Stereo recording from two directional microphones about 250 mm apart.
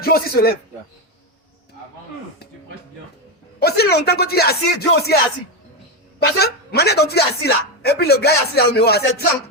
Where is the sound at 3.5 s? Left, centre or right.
Left.